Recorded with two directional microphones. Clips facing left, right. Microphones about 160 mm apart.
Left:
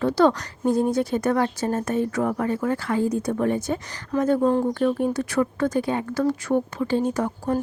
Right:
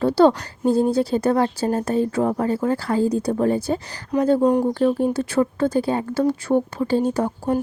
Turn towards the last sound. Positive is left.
turn(degrees=-30)  # may be behind; listen again after turning